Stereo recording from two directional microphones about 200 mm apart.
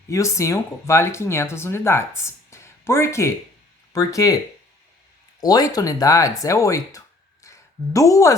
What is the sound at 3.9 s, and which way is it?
Speech, 15° left (ahead or behind).